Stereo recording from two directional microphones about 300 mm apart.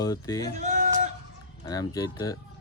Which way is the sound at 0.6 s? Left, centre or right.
Right.